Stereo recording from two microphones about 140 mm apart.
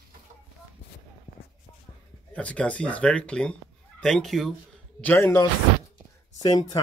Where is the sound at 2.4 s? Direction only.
10° left (ahead or behind).